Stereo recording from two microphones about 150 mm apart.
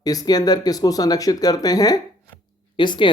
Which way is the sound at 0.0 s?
25° left (ahead or behind).